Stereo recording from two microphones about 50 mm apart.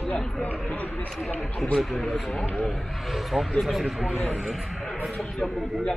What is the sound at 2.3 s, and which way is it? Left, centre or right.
Speech, centre.